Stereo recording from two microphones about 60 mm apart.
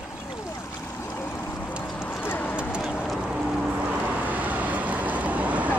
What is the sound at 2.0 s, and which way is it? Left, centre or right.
Clip-clop, left.